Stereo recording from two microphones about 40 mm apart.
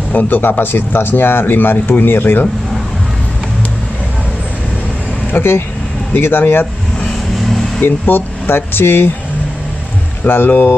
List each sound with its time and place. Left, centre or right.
0.1 s speech: left
0.4 s speech: left
6.1 s speech: left
8.0 s speech: left
10.2 s speech: left